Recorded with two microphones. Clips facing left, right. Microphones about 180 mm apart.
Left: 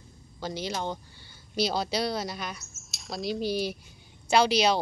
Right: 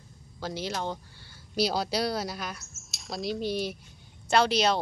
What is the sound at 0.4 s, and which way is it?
Speech, 5° right (ahead or behind).